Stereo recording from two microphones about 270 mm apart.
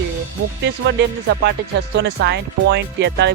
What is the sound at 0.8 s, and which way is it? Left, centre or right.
Speech, right.